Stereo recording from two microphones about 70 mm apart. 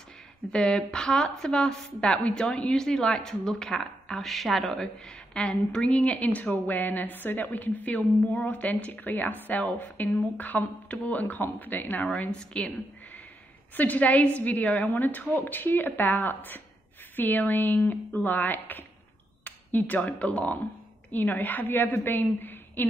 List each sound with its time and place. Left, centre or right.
0.5 s a woman's voice: centre
12.1 s a woman's voice: centre